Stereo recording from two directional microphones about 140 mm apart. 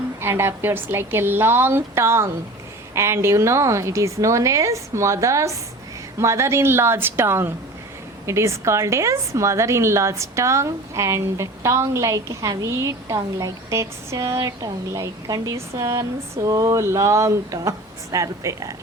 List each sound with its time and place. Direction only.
0.2 s a woman's voice: 15° right (ahead or behind)